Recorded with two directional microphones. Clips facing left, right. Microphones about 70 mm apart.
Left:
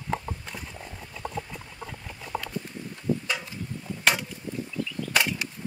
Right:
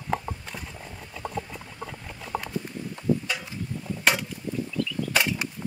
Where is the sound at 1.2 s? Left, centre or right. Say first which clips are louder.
Right 1 dB; centre.